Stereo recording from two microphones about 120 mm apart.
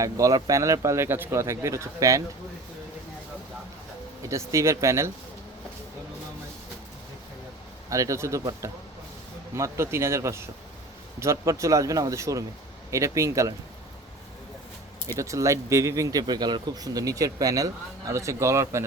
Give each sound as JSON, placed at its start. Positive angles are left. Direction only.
{"t": 0.0, "sound": "speech", "side_deg": -30}
{"t": 4.2, "sound": "speech", "side_deg": -25}
{"t": 7.9, "sound": "speech", "side_deg": -25}
{"t": 15.2, "sound": "speech", "side_deg": -25}